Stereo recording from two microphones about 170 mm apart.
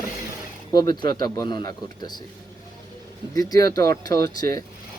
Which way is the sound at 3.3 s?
20° left (ahead or behind).